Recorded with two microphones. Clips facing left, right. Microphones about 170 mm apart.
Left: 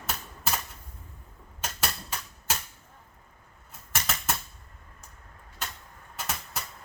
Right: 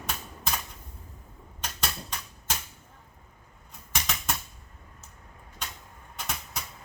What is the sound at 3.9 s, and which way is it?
Typewriter, 5° left (ahead or behind).